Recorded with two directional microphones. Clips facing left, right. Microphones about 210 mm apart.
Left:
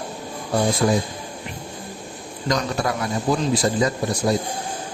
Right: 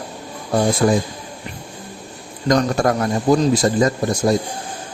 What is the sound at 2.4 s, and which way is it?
Speech, 45° right (ahead or behind).